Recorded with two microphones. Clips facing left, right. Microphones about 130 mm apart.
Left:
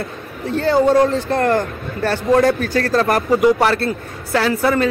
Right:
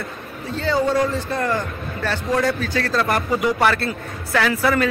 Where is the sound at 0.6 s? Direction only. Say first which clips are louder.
Left 6 dB; 55° left (ahead or behind).